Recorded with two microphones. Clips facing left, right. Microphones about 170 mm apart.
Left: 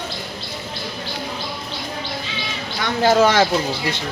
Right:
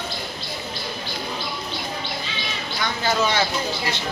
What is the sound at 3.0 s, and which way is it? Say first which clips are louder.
Speech: left 8 dB; 90° left.